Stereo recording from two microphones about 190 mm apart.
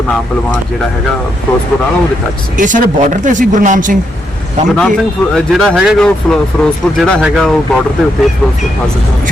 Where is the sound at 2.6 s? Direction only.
45° right (ahead or behind).